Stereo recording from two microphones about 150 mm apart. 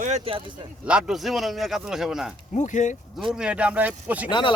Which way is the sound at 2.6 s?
55° left (ahead or behind).